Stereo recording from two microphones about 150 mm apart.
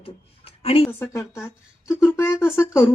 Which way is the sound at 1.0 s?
20° left (ahead or behind).